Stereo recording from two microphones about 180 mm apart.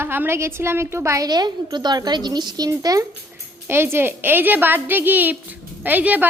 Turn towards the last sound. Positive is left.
turn(degrees=-10)  # may be behind; listen again after turning